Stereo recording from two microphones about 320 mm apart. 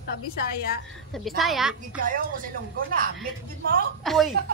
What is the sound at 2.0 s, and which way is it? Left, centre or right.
Speech, right.